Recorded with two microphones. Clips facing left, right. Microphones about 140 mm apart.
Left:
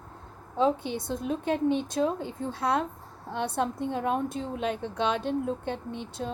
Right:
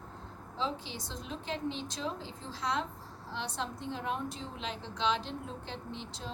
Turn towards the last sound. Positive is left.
turn(degrees=55)  # may be behind; listen again after turning